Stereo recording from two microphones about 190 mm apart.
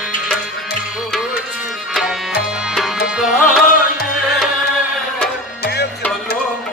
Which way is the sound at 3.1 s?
Centre (ahead or behind).